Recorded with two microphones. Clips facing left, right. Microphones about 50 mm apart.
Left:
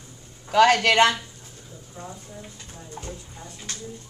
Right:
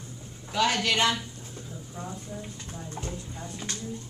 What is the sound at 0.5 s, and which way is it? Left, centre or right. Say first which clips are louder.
Speech: left 8 dB; left.